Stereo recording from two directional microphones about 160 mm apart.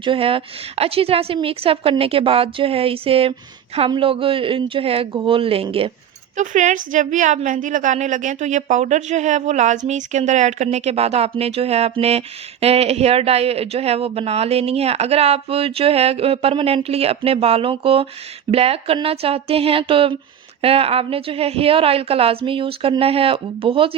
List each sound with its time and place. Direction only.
0.0 s a woman's voice: 35° right (ahead or behind)
6.3 s a woman's voice: 50° right (ahead or behind); by 23.9 s 35° right (ahead or behind)